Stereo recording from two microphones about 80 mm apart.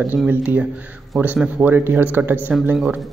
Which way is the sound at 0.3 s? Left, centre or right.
Right.